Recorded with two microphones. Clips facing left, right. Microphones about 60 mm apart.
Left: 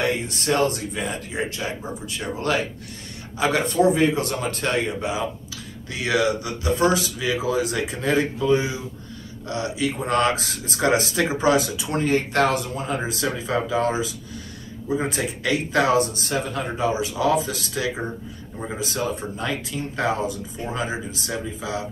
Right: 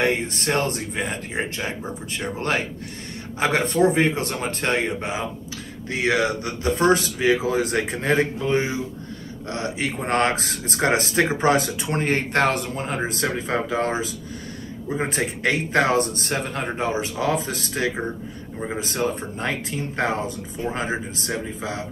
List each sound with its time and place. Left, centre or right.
0.0 s speech: right